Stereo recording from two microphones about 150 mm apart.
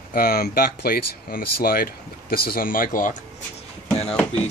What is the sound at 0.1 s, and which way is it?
Speech, 80° left.